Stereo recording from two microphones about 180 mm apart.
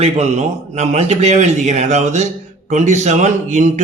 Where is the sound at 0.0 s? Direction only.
40° right (ahead or behind).